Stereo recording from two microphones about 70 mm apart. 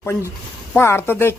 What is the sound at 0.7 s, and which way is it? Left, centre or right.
Speech, left.